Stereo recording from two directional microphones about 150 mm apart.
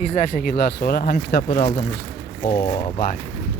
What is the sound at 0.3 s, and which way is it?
Speech, 90° left.